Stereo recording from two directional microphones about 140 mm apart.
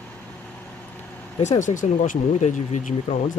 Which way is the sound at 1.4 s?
60° left (ahead or behind).